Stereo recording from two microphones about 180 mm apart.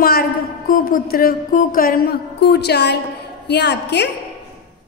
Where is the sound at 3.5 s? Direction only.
70° left (ahead or behind).